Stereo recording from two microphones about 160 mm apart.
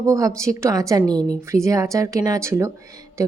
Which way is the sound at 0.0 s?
20° right (ahead or behind).